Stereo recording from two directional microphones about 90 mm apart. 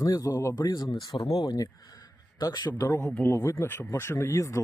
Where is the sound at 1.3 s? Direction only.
45° left (ahead or behind).